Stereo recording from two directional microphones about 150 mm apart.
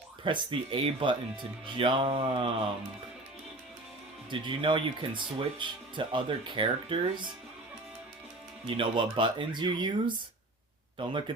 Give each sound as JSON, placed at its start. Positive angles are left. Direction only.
{"t": 0.3, "sound": "speech", "side_deg": -35}
{"t": 4.3, "sound": "speech", "side_deg": -35}
{"t": 8.6, "sound": "speech", "side_deg": -35}